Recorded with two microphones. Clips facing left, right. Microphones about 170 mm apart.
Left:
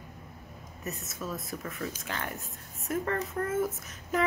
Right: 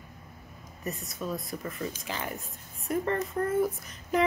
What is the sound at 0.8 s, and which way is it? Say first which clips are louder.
Speech: right 3 dB; centre (ahead or behind).